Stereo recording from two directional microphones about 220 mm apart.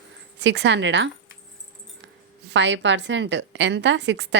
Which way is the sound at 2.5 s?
55° right (ahead or behind).